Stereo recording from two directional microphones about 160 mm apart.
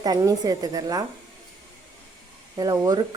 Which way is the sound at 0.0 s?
25° right (ahead or behind).